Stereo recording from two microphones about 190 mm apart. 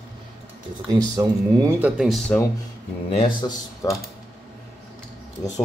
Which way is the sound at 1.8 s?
Centre (ahead or behind).